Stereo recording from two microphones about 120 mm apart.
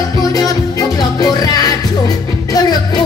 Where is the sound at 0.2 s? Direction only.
30° left (ahead or behind).